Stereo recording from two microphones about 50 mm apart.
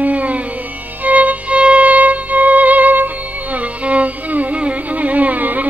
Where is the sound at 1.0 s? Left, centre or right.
Right.